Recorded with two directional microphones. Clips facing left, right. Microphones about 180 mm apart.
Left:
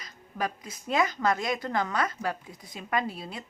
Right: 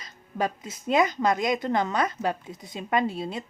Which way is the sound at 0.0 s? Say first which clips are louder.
Right 4 dB; 25° right (ahead or behind).